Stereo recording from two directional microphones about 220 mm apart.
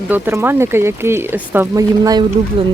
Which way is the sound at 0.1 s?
10° right (ahead or behind).